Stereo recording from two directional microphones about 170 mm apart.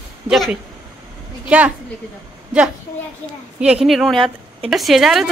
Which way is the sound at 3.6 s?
5° right (ahead or behind).